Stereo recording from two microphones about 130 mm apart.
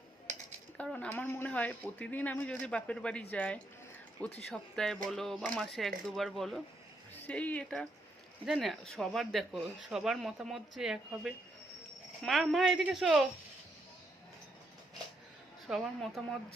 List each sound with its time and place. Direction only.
0.8 s speech: 10° left (ahead or behind)
7.1 s a woman's voice: 10° left (ahead or behind)
15.6 s speech: centre (ahead or behind)